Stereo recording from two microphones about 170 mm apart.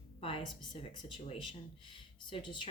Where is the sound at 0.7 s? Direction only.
30° left (ahead or behind).